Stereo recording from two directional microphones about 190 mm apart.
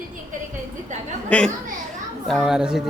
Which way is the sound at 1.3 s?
5° left (ahead or behind).